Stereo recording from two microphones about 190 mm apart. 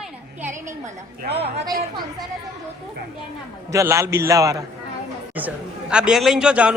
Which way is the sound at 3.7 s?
15° right (ahead or behind).